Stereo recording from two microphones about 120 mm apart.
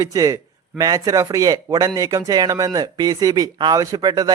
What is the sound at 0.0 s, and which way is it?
A man's voice, 30° right (ahead or behind).